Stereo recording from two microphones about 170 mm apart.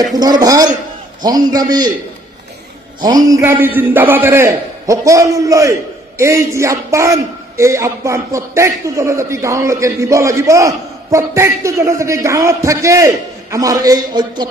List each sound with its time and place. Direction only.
0.0 s a man's voice: 20° right (ahead or behind)
3.0 s a man's voice: 20° right (ahead or behind)